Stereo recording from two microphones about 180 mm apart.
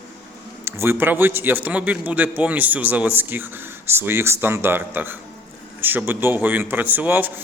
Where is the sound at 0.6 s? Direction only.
15° right (ahead or behind).